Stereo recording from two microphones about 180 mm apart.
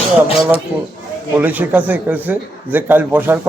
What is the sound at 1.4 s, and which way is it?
A man's voice, 10° right (ahead or behind).